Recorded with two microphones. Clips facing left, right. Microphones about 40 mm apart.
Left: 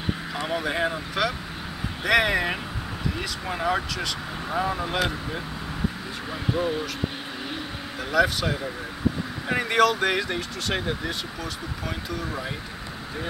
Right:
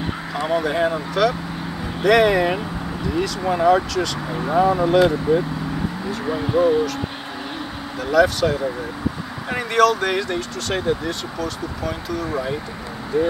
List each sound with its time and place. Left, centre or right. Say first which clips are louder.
0.3 s speech: right 8 dB; centre
4.6 s speech: right 10 dB; centre
8.0 s speech: right 6 dB; centre